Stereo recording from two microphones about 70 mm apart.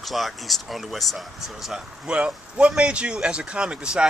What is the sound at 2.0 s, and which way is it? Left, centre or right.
Speech, centre.